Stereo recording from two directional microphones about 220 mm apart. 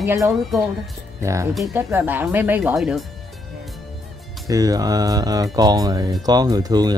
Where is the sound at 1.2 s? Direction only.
15° right (ahead or behind).